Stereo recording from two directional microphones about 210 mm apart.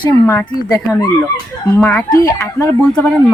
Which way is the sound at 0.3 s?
15° left (ahead or behind).